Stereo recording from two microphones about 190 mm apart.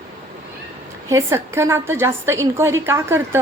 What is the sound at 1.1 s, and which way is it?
A woman's voice, 15° right (ahead or behind).